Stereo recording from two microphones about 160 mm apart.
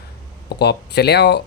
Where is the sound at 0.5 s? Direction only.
90° left.